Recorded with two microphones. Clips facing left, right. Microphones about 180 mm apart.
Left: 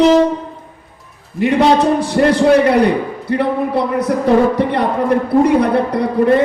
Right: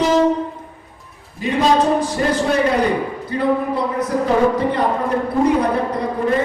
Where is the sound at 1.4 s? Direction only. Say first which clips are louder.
Left 4 dB; 70° left (ahead or behind).